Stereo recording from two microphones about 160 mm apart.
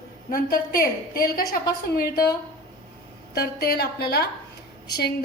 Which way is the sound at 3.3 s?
75° left (ahead or behind).